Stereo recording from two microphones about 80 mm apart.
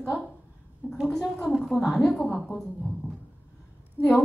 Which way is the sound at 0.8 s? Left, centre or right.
Left.